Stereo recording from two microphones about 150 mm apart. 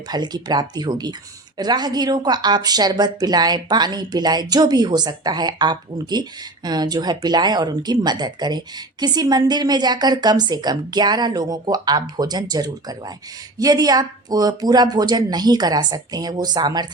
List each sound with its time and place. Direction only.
0.1 s speech: 25° right (ahead or behind)